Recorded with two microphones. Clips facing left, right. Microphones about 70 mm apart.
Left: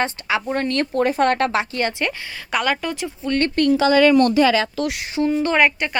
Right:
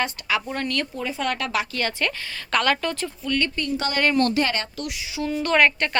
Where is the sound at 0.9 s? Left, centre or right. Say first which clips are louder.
Left 9 dB; left.